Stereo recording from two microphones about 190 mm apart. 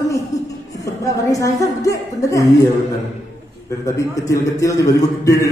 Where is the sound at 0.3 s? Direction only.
15° left (ahead or behind).